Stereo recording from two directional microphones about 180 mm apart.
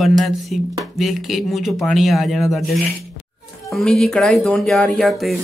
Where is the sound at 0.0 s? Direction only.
Centre (ahead or behind).